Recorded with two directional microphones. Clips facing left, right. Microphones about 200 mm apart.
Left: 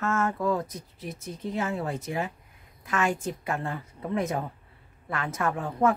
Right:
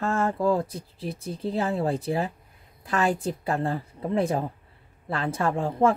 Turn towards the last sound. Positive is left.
turn(degrees=-25)  # may be behind; listen again after turning